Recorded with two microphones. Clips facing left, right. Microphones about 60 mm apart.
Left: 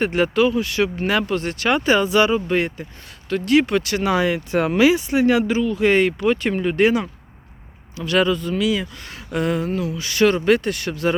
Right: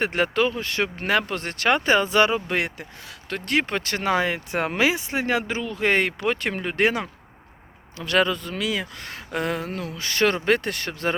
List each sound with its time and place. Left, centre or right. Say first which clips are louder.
0.0 s speech: left 4 dB; right
3.2 s speech: left 7 dB; right